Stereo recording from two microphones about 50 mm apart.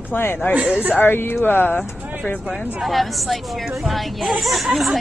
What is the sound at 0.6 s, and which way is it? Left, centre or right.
Speech, right.